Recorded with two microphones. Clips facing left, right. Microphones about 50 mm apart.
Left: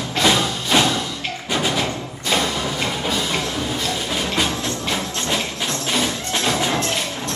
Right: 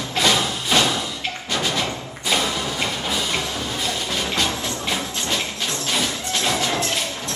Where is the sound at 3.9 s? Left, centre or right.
Centre.